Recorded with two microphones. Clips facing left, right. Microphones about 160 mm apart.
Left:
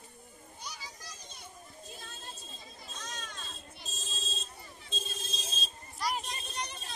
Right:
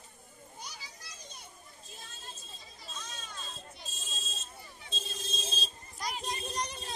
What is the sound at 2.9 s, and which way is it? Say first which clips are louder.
Children playing: left 2 dB; 80° left.